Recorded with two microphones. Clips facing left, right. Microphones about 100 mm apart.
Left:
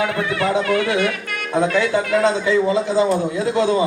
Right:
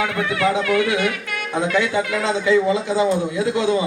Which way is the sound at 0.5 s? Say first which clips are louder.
Left 1 dB; 40° left (ahead or behind).